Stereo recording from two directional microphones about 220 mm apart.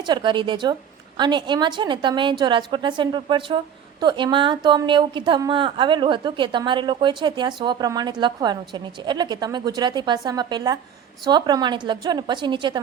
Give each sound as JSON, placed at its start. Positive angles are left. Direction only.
{"t": 0.0, "sound": "a woman's voice", "side_deg": -20}